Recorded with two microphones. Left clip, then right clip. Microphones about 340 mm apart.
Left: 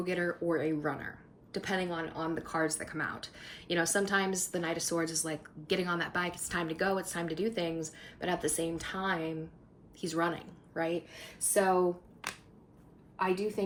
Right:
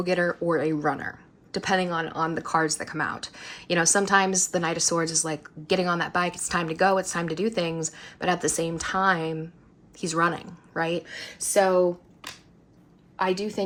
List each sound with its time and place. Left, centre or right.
0.0 s a woman's voice: centre